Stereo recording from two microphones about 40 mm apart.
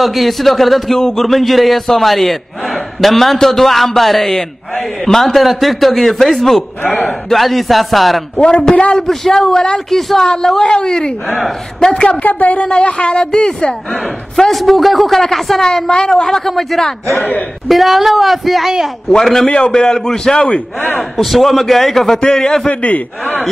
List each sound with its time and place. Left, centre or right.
0.0 s a man's voice: centre
8.4 s a man's voice: left
9.0 s speech: centre
11.2 s a man's voice: centre
11.9 s a woman's voice: left
12.6 s a man's voice: left
14.3 s a man's voice: centre
15.6 s a man's voice: centre
19.0 s speech: centre
19.5 s a man's voice: left
21.2 s a man's voice: centre
22.7 s a woman's voice: left
23.2 s speech: centre